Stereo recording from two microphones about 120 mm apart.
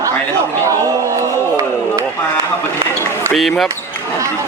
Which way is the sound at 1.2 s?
25° right (ahead or behind).